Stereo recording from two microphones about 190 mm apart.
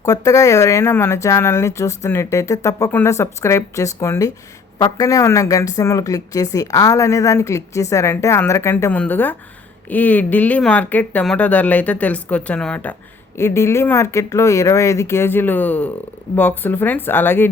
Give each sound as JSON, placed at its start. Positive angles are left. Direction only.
{"t": 0.0, "sound": "speech", "side_deg": 15}